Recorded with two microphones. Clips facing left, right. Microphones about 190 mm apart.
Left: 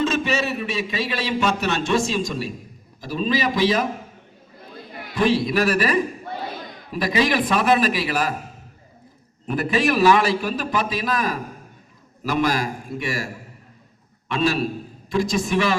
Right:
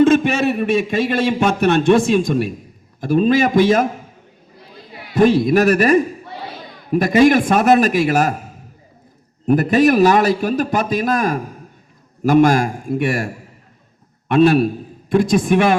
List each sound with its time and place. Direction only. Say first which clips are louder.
0.0 s a man's voice: right 9 dB; 55° right (ahead or behind)
4.9 s a sound: even; 45° left (ahead or behind)
5.1 s a man's voice: right 7 dB; 45° right (ahead or behind)
9.5 s a man's voice: right 8 dB; 45° right (ahead or behind)